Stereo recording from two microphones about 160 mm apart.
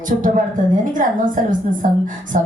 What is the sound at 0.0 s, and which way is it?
A woman's voice, 55° right (ahead or behind).